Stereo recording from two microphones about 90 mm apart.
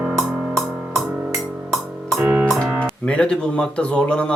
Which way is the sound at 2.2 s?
15° right (ahead or behind).